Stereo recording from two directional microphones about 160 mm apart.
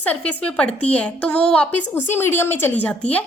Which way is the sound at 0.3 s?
5° left (ahead or behind).